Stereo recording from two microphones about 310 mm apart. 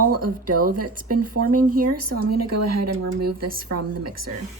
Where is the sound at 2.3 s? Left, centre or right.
Right.